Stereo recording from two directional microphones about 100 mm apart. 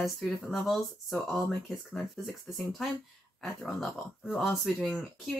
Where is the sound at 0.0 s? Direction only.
Centre (ahead or behind).